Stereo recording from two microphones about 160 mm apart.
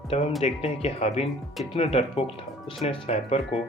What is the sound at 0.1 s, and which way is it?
Speech, 40° left (ahead or behind).